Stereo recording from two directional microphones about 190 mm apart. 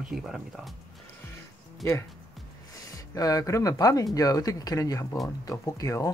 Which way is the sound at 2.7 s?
20° left (ahead or behind).